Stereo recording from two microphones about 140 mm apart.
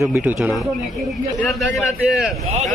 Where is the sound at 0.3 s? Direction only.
Centre (ahead or behind).